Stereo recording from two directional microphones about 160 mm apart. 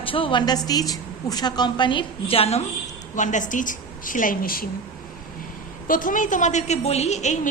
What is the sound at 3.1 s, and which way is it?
A woman's voice, 50° left (ahead or behind).